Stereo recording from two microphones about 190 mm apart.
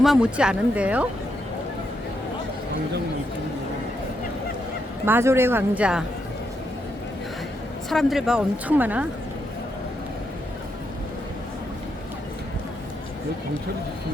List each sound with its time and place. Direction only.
0.0 s speech: 5° right (ahead or behind)
5.0 s speech: 10° right (ahead or behind)
7.9 s speech: centre (ahead or behind)